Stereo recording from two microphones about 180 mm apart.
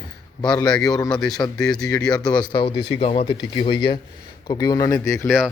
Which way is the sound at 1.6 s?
5° left (ahead or behind).